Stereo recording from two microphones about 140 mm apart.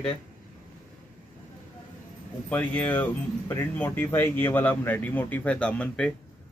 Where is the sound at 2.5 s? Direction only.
10° left (ahead or behind).